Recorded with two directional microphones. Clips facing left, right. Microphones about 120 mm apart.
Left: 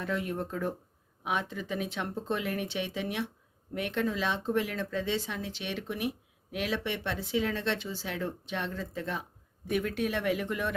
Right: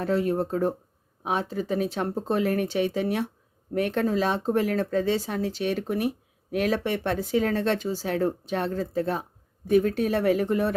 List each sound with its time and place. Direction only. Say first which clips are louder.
0.0 s speech: right 8 dB; 35° right (ahead or behind)